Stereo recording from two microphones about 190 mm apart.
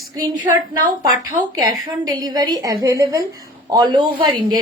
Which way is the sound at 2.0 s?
20° right (ahead or behind).